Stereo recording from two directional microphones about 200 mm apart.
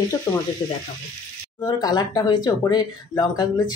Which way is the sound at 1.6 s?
20° left (ahead or behind).